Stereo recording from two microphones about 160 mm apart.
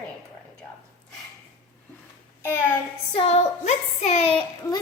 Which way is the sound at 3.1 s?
45° left (ahead or behind).